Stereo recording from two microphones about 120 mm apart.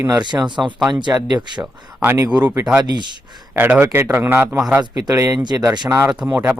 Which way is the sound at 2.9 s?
40° right (ahead or behind).